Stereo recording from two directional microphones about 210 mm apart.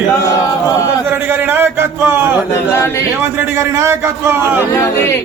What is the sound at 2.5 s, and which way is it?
Speech, 10° left (ahead or behind).